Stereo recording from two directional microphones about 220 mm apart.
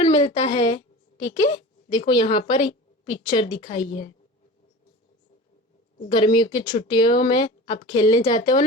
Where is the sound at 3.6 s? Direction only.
35° left (ahead or behind).